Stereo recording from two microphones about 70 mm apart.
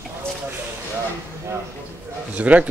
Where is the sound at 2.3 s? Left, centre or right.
Centre.